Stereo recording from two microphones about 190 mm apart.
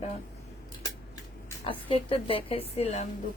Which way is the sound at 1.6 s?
30° left (ahead or behind).